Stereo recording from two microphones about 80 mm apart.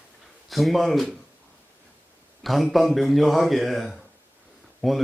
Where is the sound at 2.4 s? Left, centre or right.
Centre.